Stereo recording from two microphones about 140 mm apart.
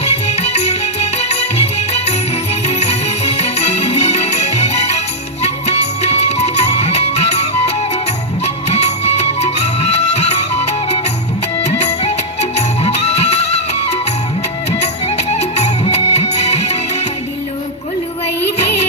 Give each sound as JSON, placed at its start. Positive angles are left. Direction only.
{"t": 0.0, "sound": "music", "side_deg": 50}